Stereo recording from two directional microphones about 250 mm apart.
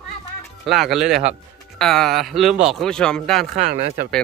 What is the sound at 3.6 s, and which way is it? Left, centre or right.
Speech, right.